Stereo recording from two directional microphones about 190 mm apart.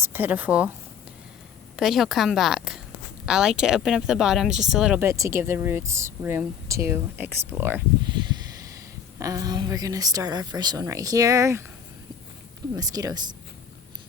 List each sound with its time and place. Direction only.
0.0 s speech: 10° right (ahead or behind)
1.7 s speech: centre (ahead or behind)
5.0 s speech: 15° right (ahead or behind)
9.1 s speech: 20° right (ahead or behind)
12.7 s speech: 20° right (ahead or behind)